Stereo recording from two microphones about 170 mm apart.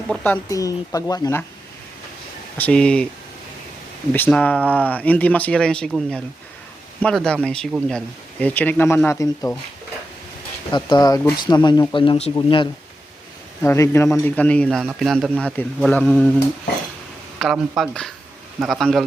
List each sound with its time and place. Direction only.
0.1 s speech: 10° left (ahead or behind)
2.6 s speech: 5° left (ahead or behind)
4.1 s a man's voice: 10° left (ahead or behind)
7.0 s a man's voice: 5° left (ahead or behind)
10.7 s speech: 25° left (ahead or behind)
13.6 s a man's voice: 15° left (ahead or behind)
17.4 s speech: centre (ahead or behind)